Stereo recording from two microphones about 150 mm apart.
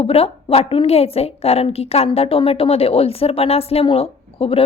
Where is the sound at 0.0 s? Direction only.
40° left (ahead or behind).